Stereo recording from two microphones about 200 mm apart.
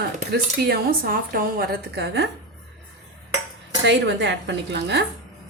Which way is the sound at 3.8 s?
65° right (ahead or behind).